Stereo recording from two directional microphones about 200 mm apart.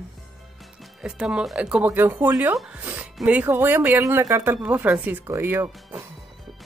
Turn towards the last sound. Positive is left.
turn(degrees=-10)  # may be behind; listen again after turning